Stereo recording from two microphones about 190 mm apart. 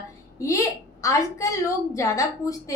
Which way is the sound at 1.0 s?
15° left (ahead or behind).